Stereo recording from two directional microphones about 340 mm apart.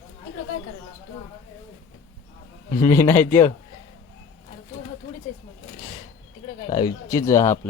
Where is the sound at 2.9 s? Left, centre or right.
Centre.